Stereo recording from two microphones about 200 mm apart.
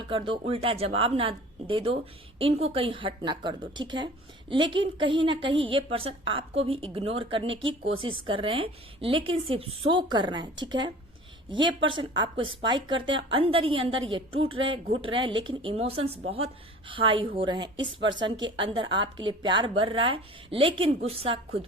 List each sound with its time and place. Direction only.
0.1 s a woman's voice: 25° right (ahead or behind)